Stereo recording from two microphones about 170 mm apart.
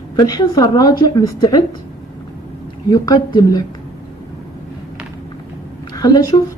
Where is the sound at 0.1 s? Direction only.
20° left (ahead or behind).